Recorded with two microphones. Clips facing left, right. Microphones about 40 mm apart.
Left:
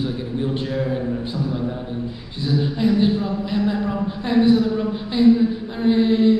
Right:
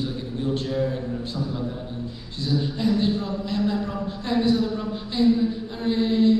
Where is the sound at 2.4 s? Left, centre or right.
Centre.